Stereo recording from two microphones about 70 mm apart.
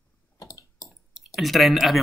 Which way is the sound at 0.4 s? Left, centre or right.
Left.